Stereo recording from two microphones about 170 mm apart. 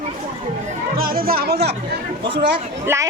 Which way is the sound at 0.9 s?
60° right (ahead or behind).